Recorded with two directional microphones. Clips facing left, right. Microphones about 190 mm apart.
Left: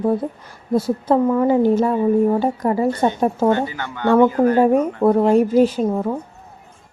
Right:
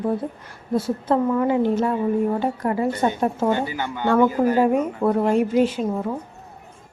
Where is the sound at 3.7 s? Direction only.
15° right (ahead or behind).